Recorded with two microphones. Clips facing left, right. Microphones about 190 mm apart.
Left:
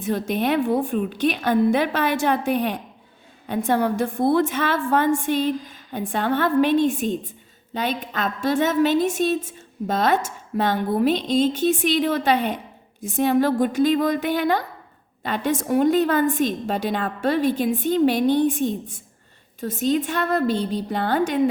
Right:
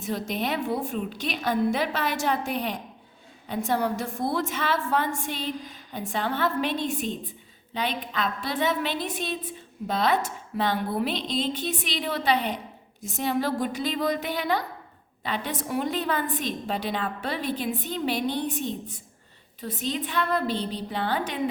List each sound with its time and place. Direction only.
0.0 s a woman's voice: 55° left (ahead or behind)